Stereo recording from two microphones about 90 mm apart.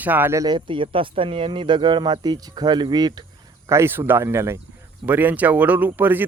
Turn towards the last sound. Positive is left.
turn(degrees=-20)  # may be behind; listen again after turning